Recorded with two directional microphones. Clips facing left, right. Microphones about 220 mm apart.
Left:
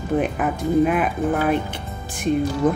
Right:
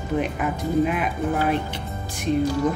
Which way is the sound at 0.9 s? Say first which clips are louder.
Left 4 dB; 50° left (ahead or behind).